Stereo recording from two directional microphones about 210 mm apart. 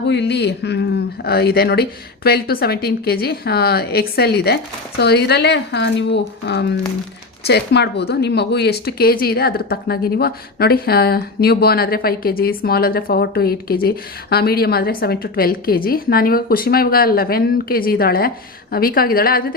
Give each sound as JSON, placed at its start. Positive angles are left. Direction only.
{"t": 0.0, "sound": "speech", "side_deg": 55}